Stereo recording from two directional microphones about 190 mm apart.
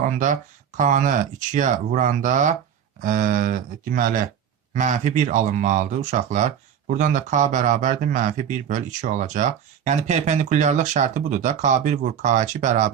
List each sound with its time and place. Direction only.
0.0 s speech: 40° right (ahead or behind)